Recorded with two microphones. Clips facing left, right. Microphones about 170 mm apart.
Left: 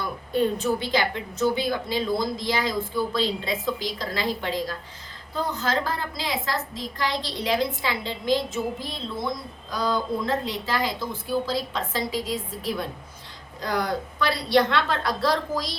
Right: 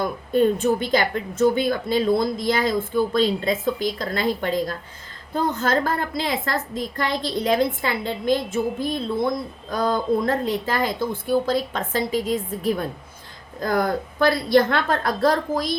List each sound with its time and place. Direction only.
0.0 s speech: 50° right (ahead or behind)